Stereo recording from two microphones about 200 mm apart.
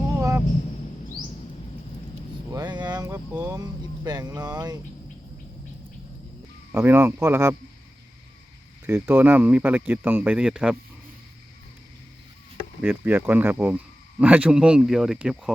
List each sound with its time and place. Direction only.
0.2 s a sound: 15° right (ahead or behind)
2.5 s speech: 20° right (ahead or behind)
6.7 s speech: 10° right (ahead or behind)
8.9 s speech: 10° right (ahead or behind)
12.8 s speech: 5° right (ahead or behind)